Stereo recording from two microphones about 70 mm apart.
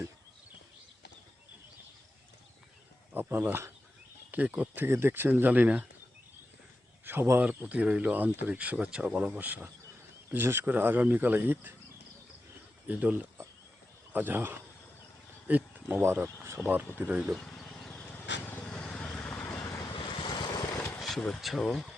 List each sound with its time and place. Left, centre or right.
3.1 s speech: right
4.9 s speech: right
7.0 s a man's voice: right
12.9 s speech: right
17.3 s a sound: centre
18.0 s a sound: left
18.6 s vehicle: centre
19.5 s vehicle: left
19.8 s vehicle: left
20.7 s a sound: left
21.0 s speech: centre